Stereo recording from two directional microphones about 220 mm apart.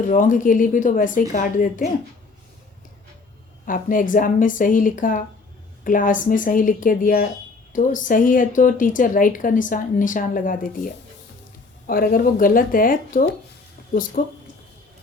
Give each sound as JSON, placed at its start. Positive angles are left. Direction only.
{"t": 0.1, "sound": "a woman's voice", "side_deg": 35}
{"t": 3.7, "sound": "a woman's voice", "side_deg": 40}